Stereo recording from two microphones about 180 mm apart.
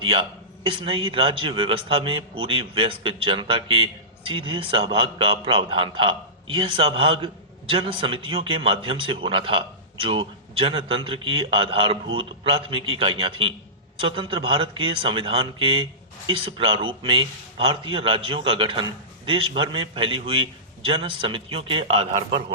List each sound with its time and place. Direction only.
0.0 s a man's voice: 30° right (ahead or behind)